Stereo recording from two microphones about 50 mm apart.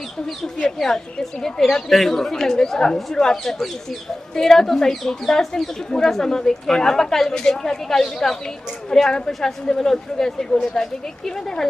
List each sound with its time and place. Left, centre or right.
0.8 s speech: centre